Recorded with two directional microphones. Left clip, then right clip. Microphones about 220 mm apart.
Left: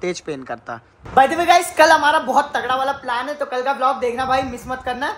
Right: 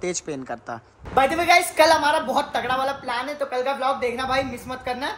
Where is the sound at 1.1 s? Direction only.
20° left (ahead or behind).